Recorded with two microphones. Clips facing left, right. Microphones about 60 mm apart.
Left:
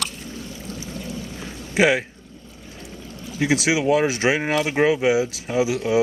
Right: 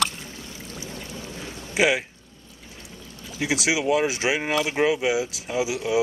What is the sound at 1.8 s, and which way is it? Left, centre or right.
Speech, centre.